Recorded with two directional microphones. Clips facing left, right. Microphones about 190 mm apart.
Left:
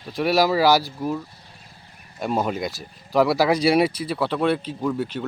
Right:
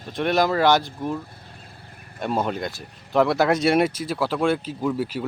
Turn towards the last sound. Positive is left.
turn(degrees=-5)  # may be behind; listen again after turning